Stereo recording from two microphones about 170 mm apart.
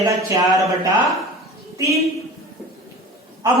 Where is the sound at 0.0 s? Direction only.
20° right (ahead or behind).